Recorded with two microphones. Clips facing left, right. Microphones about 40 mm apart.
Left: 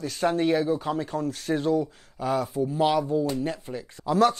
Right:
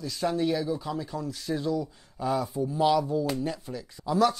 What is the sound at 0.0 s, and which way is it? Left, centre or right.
Speech, left.